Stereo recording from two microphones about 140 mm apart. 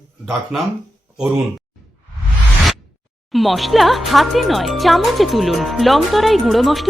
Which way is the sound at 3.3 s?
Centre (ahead or behind).